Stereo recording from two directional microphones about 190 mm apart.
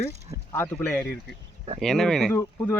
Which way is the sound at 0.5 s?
10° left (ahead or behind).